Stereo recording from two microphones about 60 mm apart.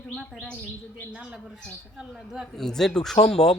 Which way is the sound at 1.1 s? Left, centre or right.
Centre.